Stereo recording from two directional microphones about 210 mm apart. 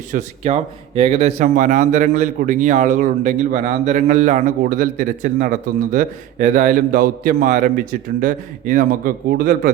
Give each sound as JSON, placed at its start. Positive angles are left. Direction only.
{"t": 0.1, "sound": "speech", "side_deg": -35}